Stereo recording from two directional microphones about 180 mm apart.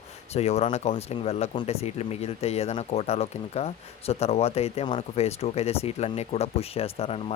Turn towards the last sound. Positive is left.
turn(degrees=35)  # may be behind; listen again after turning